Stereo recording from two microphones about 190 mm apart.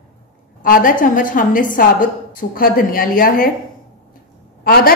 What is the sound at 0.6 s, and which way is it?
A woman's voice, 45° left (ahead or behind).